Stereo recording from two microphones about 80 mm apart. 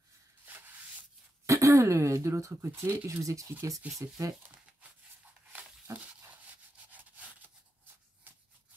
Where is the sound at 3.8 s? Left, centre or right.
Centre.